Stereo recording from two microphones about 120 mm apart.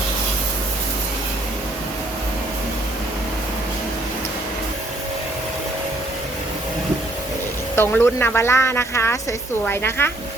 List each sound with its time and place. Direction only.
7.8 s speech: 20° left (ahead or behind)